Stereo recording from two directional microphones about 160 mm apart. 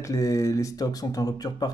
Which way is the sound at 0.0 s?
20° left (ahead or behind).